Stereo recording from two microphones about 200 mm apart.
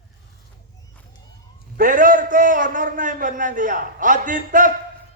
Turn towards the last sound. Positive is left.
turn(degrees=-40)  # may be behind; listen again after turning